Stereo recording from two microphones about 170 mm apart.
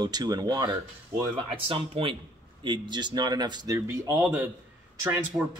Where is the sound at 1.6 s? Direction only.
35° right (ahead or behind); by 4.2 s 15° right (ahead or behind).